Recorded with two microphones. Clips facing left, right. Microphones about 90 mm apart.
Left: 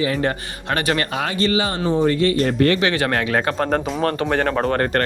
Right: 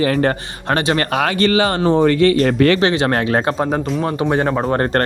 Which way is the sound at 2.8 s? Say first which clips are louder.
Right 4 dB; 30° right (ahead or behind).